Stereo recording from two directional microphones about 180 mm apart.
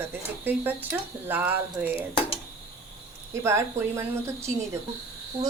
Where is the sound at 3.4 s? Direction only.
15° right (ahead or behind).